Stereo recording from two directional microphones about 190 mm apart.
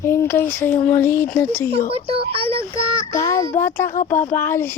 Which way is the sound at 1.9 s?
30° right (ahead or behind).